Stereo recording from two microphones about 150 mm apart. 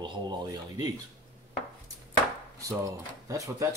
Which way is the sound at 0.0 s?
30° right (ahead or behind).